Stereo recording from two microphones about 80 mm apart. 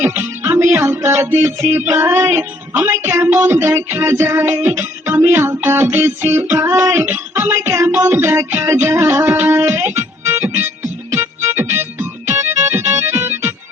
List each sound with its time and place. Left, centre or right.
0.1 s music: right
1.8 s music: right
4.6 s music: right
6.6 s child singing: right
7.0 s speech: right
7.4 s music: right
11.5 s music: right